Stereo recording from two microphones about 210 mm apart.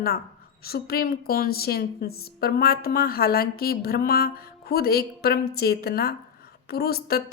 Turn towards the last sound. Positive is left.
turn(degrees=45)  # may be behind; listen again after turning